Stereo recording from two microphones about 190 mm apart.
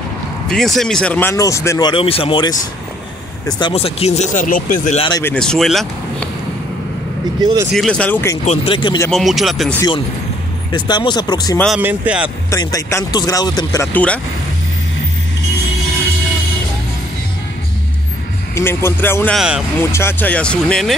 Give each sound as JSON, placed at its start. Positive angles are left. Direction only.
{"t": 0.5, "sound": "speech", "side_deg": 0}
{"t": 5.2, "sound": "speech", "side_deg": 5}
{"t": 7.7, "sound": "speech", "side_deg": 5}
{"t": 8.5, "sound": "speech", "side_deg": 25}
{"t": 9.1, "sound": "speech", "side_deg": 0}
{"t": 9.8, "sound": "speech", "side_deg": 25}
{"t": 11.7, "sound": "speech", "side_deg": -10}
{"t": 12.4, "sound": "speech", "side_deg": 15}
{"t": 18.5, "sound": "speech", "side_deg": 15}
{"t": 19.3, "sound": "speech", "side_deg": -5}
{"t": 19.8, "sound": "speech", "side_deg": 15}